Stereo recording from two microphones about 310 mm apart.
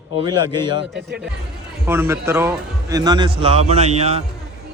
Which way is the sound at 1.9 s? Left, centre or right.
Centre.